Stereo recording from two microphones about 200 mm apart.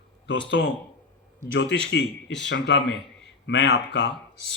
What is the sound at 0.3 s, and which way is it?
A man's voice, 65° left (ahead or behind).